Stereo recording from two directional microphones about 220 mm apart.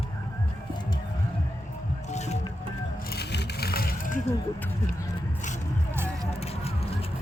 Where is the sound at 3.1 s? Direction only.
45° left (ahead or behind).